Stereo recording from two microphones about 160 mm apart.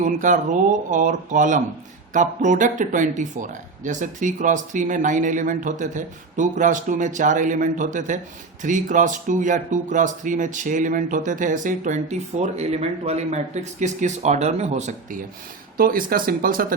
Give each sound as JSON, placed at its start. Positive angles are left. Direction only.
{"t": 0.0, "sound": "speech", "side_deg": -55}
{"t": 15.8, "sound": "speech", "side_deg": -65}